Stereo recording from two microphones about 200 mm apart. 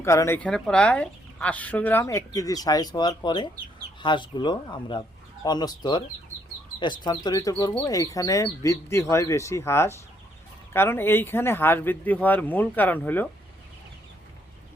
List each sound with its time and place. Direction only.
0.0 s speech: 15° left (ahead or behind)